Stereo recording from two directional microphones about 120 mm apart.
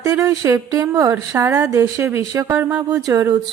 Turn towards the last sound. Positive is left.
turn(degrees=-30)  # may be behind; listen again after turning